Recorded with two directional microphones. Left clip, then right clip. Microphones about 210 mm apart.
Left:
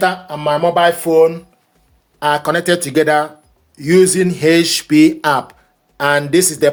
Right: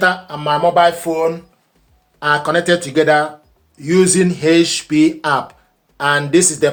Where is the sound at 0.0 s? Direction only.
40° left (ahead or behind).